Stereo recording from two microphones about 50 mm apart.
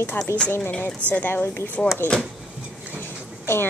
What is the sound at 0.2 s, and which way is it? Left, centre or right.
Speech, left.